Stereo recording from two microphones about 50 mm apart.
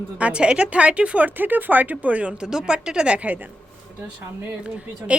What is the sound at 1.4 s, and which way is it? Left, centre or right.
Speech, right.